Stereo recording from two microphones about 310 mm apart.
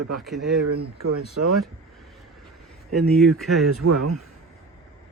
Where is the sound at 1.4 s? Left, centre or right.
Right.